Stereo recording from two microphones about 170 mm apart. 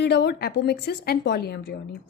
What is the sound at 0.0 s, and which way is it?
A woman's voice, 80° left.